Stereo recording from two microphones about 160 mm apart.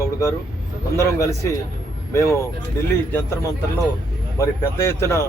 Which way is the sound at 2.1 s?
15° left (ahead or behind).